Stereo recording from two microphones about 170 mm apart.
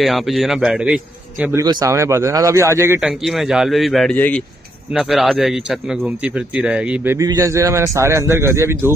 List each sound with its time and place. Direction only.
0.0 s speech: centre (ahead or behind)
1.6 s a man's voice: 20° right (ahead or behind)
3.0 s speech: centre (ahead or behind)
7.2 s a man's voice: 20° right (ahead or behind)